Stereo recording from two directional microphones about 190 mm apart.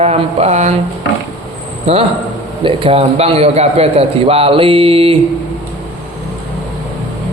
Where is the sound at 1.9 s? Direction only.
30° right (ahead or behind).